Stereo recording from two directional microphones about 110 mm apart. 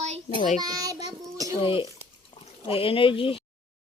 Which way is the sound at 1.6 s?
55° left (ahead or behind).